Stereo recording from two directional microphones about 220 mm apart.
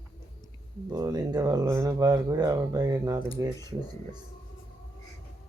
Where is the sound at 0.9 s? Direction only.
15° right (ahead or behind).